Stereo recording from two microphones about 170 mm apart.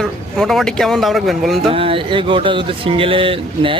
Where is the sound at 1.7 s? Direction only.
35° right (ahead or behind).